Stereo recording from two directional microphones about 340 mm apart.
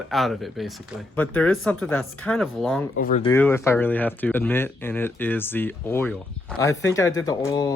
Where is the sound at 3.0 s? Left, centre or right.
Centre.